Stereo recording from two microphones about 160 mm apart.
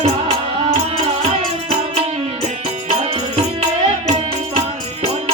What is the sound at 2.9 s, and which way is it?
Music, 40° right (ahead or behind).